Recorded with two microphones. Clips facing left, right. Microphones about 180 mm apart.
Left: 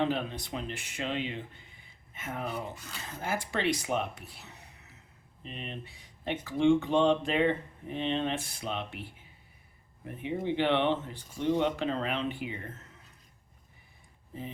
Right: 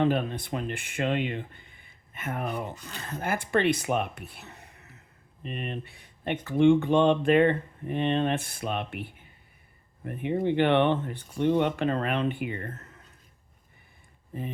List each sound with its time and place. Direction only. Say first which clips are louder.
0.1 s speech: right 5 dB; 55° right (ahead or behind)
14.3 s speech: right 5 dB; 55° right (ahead or behind)